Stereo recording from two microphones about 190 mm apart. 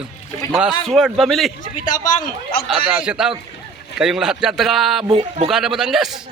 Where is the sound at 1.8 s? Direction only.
45° left (ahead or behind).